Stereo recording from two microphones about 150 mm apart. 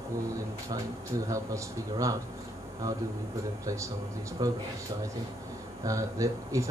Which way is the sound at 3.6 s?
20° right (ahead or behind).